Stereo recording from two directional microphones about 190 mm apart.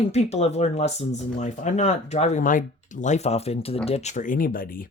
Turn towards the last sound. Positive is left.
turn(degrees=50)  # may be behind; listen again after turning